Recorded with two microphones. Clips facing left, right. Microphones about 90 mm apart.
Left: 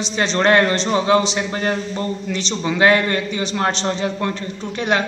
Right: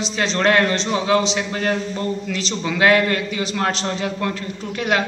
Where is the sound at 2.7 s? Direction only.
25° left (ahead or behind).